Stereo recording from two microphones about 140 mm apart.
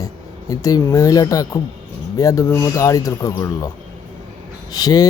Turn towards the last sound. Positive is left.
turn(degrees=25)  # may be behind; listen again after turning